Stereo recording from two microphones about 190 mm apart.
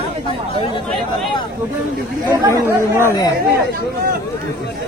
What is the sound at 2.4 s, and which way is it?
Speech, 15° right (ahead or behind).